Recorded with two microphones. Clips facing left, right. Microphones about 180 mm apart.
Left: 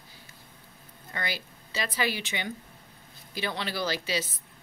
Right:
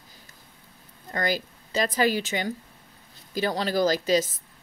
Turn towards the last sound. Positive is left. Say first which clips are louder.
# right 9 dB
turn(degrees=-45)  # may be behind; listen again after turning